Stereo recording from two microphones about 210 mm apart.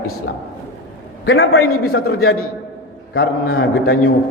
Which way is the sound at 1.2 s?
75° left (ahead or behind).